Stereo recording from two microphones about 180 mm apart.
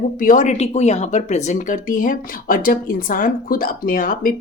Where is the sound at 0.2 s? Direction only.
45° left (ahead or behind).